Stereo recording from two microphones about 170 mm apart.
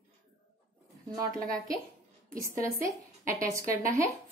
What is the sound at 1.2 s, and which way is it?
Speech, 55° right (ahead or behind).